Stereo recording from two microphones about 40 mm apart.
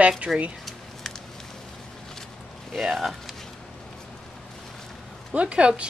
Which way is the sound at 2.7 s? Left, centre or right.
Centre.